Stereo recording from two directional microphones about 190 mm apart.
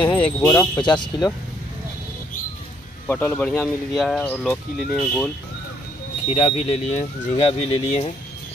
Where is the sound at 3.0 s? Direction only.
10° left (ahead or behind).